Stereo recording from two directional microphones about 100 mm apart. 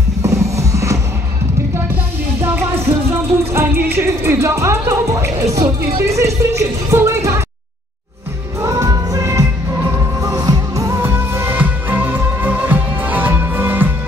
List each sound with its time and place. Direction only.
0.2 s music: 30° right (ahead or behind)
3.5 s music: 25° right (ahead or behind)
8.6 s music: 35° right (ahead or behind); by 13.9 s 20° right (ahead or behind)